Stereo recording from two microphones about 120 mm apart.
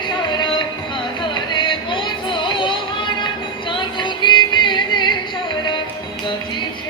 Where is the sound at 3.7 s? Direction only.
40° left (ahead or behind).